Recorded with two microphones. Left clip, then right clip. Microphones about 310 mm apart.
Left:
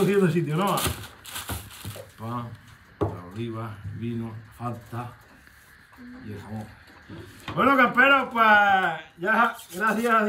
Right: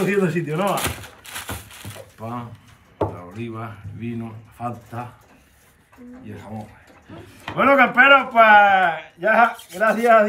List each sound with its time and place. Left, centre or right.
0.0 s speech: centre
1.8 s a sound: centre
3.0 s speech: centre
7.5 s a man's voice: centre